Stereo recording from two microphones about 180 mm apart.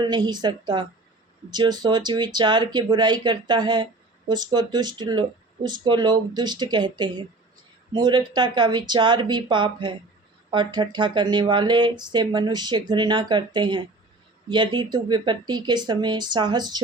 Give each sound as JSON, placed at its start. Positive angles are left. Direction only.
{"t": 0.0, "sound": "speech", "side_deg": -25}